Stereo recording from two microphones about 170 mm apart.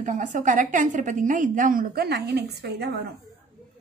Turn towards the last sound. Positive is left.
turn(degrees=-70)  # may be behind; listen again after turning